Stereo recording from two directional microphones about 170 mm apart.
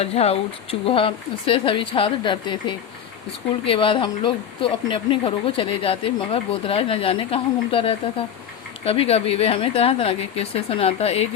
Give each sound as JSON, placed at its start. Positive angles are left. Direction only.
{"t": 0.0, "sound": "speech", "side_deg": 35}